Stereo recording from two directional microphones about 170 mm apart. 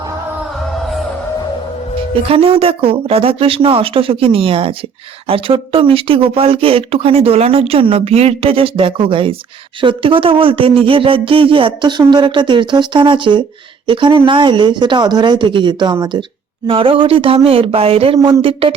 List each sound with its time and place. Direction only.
2.3 s speech: 35° right (ahead or behind)
18.2 s speech: 25° right (ahead or behind)